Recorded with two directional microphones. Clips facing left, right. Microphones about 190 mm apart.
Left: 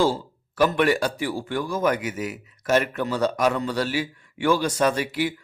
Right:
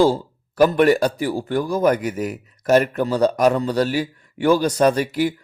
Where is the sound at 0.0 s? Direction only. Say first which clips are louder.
Right 5 dB; 40° right (ahead or behind).